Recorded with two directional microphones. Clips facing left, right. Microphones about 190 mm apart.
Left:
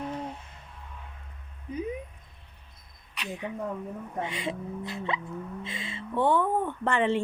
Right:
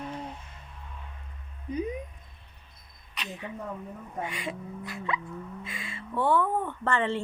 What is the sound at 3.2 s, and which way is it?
Speech, 10° left (ahead or behind).